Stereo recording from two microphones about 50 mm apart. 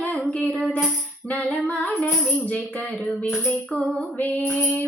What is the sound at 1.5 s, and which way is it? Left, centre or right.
Child singing, left.